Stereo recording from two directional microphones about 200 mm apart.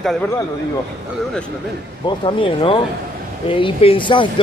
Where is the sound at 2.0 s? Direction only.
25° left (ahead or behind).